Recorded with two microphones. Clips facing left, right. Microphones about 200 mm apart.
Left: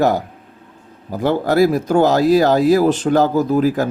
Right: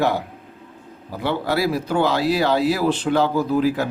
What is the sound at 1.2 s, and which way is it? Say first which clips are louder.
Speech: left 7 dB; 45° left (ahead or behind).